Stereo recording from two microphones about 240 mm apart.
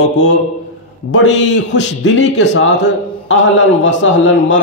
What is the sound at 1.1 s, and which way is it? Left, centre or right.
A man's voice, left.